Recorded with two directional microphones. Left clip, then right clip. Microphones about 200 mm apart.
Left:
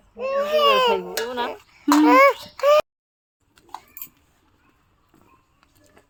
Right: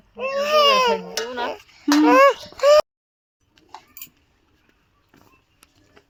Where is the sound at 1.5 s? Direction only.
30° right (ahead or behind).